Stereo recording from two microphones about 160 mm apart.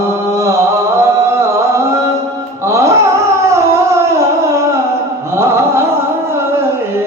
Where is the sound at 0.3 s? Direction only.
20° right (ahead or behind).